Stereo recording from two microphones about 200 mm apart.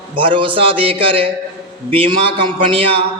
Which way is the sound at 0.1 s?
25° right (ahead or behind).